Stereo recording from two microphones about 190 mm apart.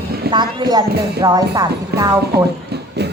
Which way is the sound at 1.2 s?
20° right (ahead or behind).